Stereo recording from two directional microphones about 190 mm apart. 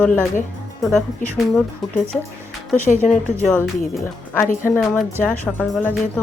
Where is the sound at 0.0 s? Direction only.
5° left (ahead or behind).